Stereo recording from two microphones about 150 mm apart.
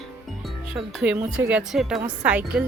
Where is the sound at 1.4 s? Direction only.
10° right (ahead or behind).